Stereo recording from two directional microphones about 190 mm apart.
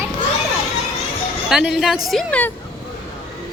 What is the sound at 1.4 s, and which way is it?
Speech, centre (ahead or behind).